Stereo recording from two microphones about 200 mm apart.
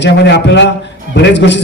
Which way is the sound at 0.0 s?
60° left (ahead or behind).